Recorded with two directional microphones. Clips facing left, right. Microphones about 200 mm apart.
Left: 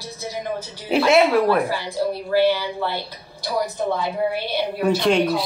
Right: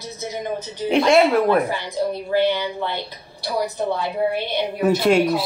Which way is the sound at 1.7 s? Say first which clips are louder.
Even; 20° right (ahead or behind).